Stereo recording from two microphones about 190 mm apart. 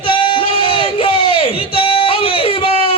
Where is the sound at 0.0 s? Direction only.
25° left (ahead or behind).